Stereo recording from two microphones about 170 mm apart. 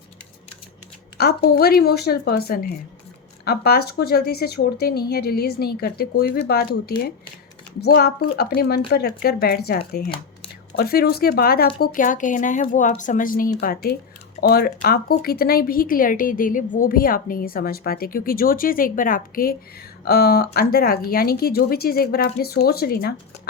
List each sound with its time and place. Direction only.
1.2 s a woman's voice: 65° left (ahead or behind)
11.8 s speech: 50° left (ahead or behind)
13.6 s a woman's voice: 65° left (ahead or behind)